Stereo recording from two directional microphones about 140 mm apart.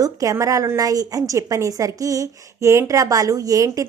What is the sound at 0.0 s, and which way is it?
A woman's voice, 25° right (ahead or behind).